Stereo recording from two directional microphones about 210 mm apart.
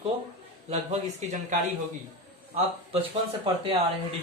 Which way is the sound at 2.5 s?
30° right (ahead or behind).